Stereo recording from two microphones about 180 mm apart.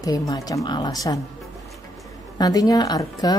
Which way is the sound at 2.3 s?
20° left (ahead or behind).